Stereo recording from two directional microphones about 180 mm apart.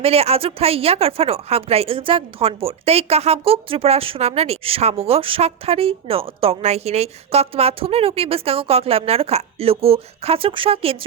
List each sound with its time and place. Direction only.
0.0 s speech: 35° right (ahead or behind)